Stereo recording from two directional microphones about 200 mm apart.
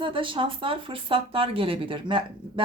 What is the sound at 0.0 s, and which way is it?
Speech, 25° right (ahead or behind).